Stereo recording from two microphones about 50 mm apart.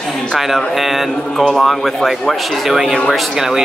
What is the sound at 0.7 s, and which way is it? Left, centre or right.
A man's voice, centre.